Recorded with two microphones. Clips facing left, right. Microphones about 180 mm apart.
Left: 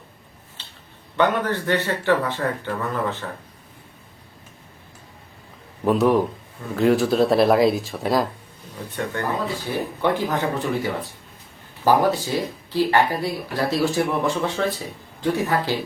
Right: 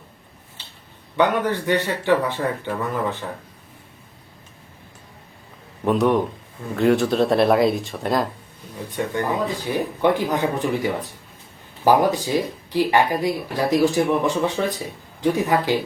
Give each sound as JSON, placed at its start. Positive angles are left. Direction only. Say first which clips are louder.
{"t": 1.1, "sound": "speech", "louder": "right 1 dB", "side_deg": -10}
{"t": 5.8, "sound": "speech", "louder": "left 1 dB", "side_deg": 0}
{"t": 8.9, "sound": "speech", "louder": "right 2 dB", "side_deg": -15}